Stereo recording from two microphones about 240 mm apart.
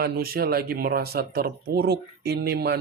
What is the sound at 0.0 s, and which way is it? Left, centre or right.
Speech, right.